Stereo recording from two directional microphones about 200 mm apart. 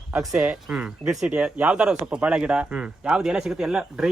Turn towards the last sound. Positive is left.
turn(degrees=-5)  # may be behind; listen again after turning